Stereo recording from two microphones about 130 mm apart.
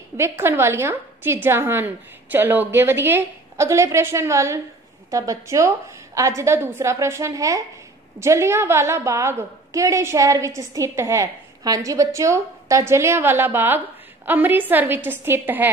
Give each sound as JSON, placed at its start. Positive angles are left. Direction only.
{"t": 0.2, "sound": "a woman's voice", "side_deg": -20}